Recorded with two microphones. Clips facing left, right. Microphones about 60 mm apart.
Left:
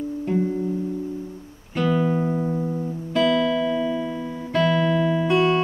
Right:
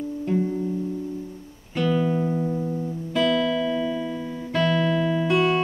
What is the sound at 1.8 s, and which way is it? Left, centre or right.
Music, centre.